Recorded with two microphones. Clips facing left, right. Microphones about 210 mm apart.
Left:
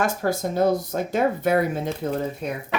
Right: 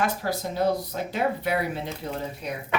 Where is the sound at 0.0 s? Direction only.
45° left (ahead or behind).